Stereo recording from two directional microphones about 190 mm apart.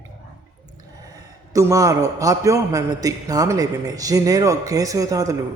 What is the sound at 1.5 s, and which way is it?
A man's voice, 15° right (ahead or behind).